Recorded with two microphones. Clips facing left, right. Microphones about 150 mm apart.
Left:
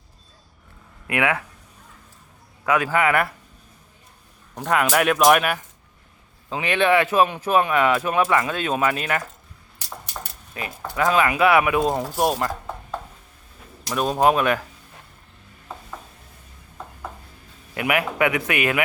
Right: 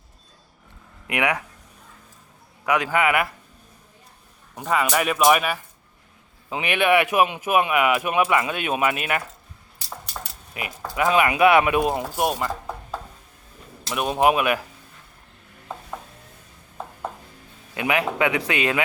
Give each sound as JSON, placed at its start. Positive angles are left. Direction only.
{"t": 1.0, "sound": "speech", "side_deg": -20}
{"t": 2.6, "sound": "speech", "side_deg": -15}
{"t": 4.5, "sound": "speech", "side_deg": -5}
{"t": 6.5, "sound": "speech", "side_deg": -15}
{"t": 10.5, "sound": "speech", "side_deg": -15}
{"t": 11.9, "sound": "speech", "side_deg": -5}
{"t": 13.9, "sound": "speech", "side_deg": -10}
{"t": 17.7, "sound": "speech", "side_deg": -25}